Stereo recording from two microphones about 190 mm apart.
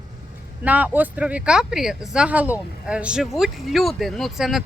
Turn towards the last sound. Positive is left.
turn(degrees=0)  # may be behind; listen again after turning